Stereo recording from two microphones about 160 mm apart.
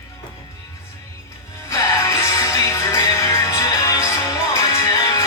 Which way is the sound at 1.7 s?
20° left (ahead or behind).